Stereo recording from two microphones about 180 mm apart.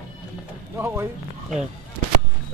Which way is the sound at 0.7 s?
15° right (ahead or behind).